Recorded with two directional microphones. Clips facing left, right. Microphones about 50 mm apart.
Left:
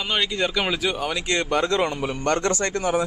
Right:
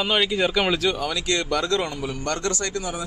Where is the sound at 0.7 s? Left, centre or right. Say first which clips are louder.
Right 1 dB; centre; by 3.0 s left.